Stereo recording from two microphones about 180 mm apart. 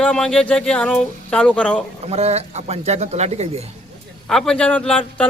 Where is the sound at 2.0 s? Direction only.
35° right (ahead or behind).